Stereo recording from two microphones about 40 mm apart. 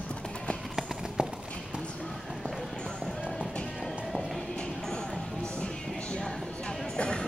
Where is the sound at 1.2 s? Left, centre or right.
Right.